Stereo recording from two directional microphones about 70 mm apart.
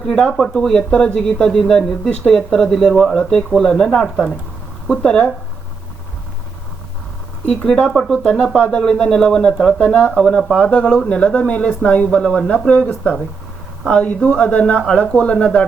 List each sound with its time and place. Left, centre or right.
0.1 s speech: centre
7.4 s speech: centre
9.7 s speech: centre
10.6 s speech: centre